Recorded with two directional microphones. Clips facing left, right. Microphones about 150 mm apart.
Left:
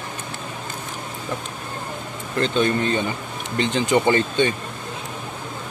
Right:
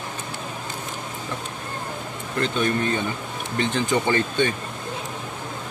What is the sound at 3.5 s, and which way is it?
Speech, 20° left (ahead or behind).